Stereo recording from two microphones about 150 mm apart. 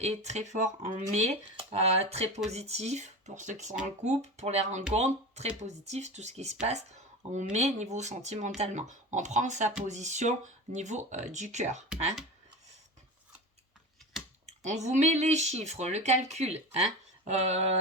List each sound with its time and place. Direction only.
0.0 s speech: 50° right (ahead or behind)
14.6 s speech: 50° right (ahead or behind)